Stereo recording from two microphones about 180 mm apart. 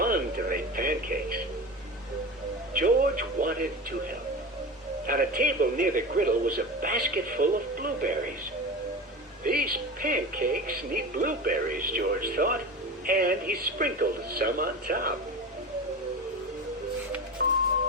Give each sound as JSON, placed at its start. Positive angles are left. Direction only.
{"t": 0.0, "sound": "speech", "side_deg": -50}
{"t": 2.7, "sound": "speech", "side_deg": -50}
{"t": 5.0, "sound": "speech", "side_deg": -50}
{"t": 9.4, "sound": "speech", "side_deg": -50}